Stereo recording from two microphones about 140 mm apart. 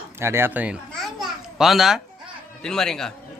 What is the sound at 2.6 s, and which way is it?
Speech, 5° left (ahead or behind).